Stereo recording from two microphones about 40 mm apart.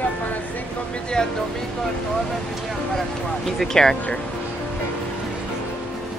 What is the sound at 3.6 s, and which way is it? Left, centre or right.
Speech, centre.